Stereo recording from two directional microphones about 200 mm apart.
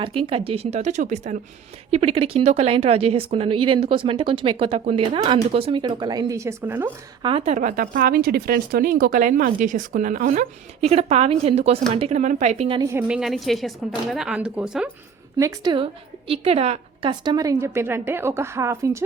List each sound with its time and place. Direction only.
0.0 s speech: 25° right (ahead or behind); by 6.9 s 10° right (ahead or behind)
7.2 s speech: 25° right (ahead or behind)
12.9 s a woman's voice: 5° right (ahead or behind)
15.4 s a woman's voice: 20° right (ahead or behind)